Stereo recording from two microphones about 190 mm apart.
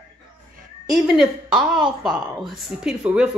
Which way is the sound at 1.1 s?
5° right (ahead or behind).